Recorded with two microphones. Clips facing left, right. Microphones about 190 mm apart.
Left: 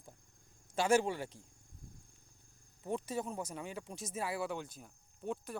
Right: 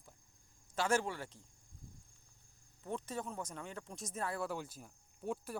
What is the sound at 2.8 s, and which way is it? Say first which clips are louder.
Speech: left 4 dB; 10° left (ahead or behind).